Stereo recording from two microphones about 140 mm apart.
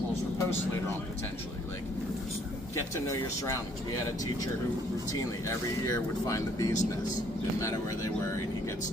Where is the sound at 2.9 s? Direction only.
20° left (ahead or behind).